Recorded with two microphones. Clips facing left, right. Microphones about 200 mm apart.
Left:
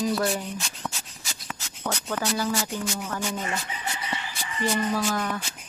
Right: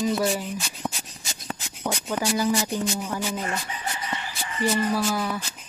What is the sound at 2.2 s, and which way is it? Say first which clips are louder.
Speech: right 4 dB; 15° right (ahead or behind).